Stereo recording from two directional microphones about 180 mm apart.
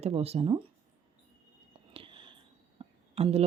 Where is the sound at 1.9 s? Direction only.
30° right (ahead or behind).